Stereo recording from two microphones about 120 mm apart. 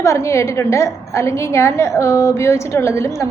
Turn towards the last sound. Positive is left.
turn(degrees=25)  # may be behind; listen again after turning